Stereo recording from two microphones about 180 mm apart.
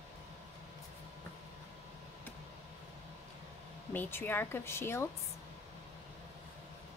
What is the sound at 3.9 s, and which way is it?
Speech, 10° left (ahead or behind).